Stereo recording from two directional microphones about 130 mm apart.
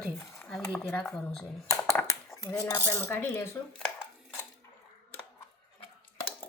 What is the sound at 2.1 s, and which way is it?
Cutlery, 25° left (ahead or behind).